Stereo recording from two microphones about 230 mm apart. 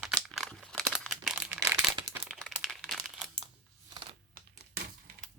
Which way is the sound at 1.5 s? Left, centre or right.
Centre.